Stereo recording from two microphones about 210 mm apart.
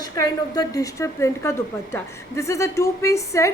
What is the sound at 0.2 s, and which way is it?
A woman's voice, 15° left (ahead or behind).